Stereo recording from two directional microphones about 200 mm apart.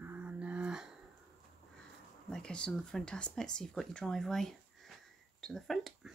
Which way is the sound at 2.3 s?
5° left (ahead or behind).